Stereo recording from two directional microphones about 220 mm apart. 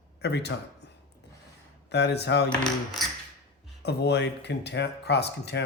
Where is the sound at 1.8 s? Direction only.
50° left (ahead or behind).